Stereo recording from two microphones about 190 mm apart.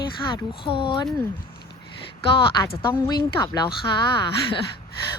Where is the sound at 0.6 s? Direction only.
25° left (ahead or behind).